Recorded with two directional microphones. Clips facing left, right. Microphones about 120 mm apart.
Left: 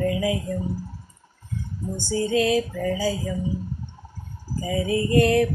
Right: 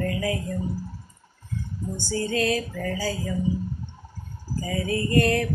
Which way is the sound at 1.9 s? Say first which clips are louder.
Left 4 dB; 20° left (ahead or behind).